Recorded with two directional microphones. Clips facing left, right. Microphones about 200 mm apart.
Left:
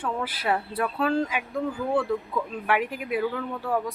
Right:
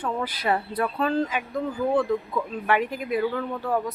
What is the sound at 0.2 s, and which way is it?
Speech, 5° left (ahead or behind).